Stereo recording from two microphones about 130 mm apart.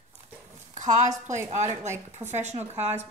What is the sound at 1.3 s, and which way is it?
Speech, 20° right (ahead or behind).